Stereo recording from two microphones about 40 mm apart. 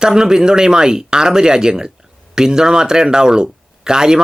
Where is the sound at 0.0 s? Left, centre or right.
Centre.